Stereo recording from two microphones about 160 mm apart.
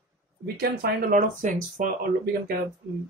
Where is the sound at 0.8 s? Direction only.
55° right (ahead or behind).